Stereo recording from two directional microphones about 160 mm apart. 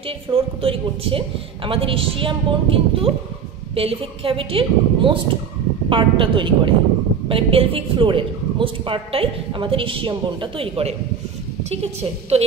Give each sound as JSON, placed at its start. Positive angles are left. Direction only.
{"t": 0.3, "sound": "a woman's voice", "side_deg": -35}